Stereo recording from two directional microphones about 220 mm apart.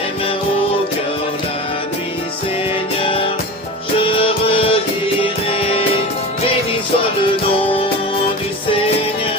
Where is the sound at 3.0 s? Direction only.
25° left (ahead or behind).